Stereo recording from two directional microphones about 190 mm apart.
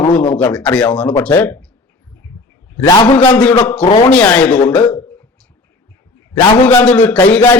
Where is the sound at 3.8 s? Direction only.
30° left (ahead or behind).